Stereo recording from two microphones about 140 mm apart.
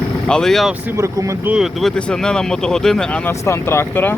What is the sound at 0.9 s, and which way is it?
Speech, 20° right (ahead or behind).